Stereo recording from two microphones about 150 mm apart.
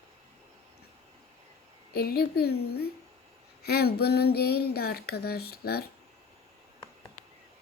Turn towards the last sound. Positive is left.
turn(degrees=90)